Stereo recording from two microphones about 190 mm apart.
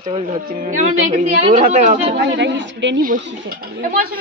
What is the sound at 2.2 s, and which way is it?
Speech, 65° right (ahead or behind).